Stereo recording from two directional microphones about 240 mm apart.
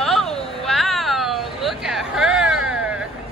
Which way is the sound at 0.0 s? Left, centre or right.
Centre.